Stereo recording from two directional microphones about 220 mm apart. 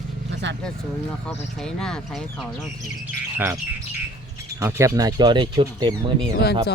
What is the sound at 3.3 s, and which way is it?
Speech, 10° right (ahead or behind).